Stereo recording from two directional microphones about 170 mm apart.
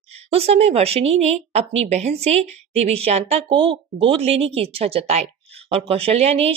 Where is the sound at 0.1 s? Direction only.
35° right (ahead or behind).